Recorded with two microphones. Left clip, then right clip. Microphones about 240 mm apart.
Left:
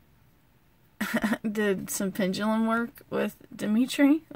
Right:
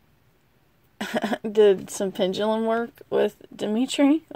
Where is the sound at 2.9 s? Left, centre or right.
Centre.